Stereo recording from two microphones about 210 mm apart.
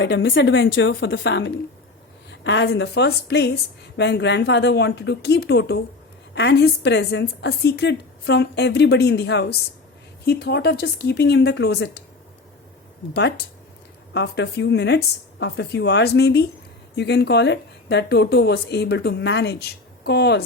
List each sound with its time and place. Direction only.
0.0 s a woman's voice: 60° left (ahead or behind)
13.1 s a woman's voice: 50° left (ahead or behind)